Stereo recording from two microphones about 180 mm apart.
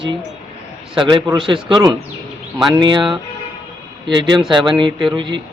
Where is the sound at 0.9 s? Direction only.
25° right (ahead or behind).